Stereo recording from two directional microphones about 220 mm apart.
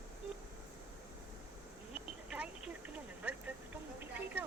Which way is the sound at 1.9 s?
5° right (ahead or behind).